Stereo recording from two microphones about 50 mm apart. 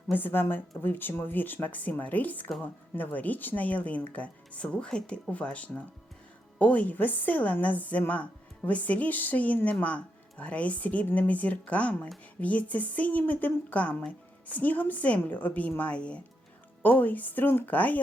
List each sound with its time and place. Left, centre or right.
0.1 s a woman's voice: left
16.8 s a woman's voice: left